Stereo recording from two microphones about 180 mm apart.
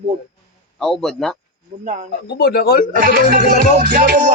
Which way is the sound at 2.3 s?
60° left (ahead or behind).